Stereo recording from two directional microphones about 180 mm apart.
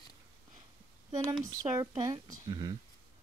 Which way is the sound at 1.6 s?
20° right (ahead or behind).